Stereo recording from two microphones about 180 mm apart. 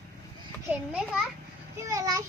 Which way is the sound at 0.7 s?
5° right (ahead or behind).